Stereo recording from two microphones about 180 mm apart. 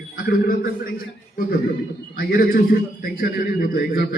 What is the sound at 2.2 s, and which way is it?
A man's voice, 55° left (ahead or behind).